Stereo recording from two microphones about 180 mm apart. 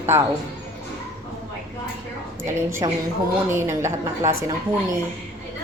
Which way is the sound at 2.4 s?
15° right (ahead or behind).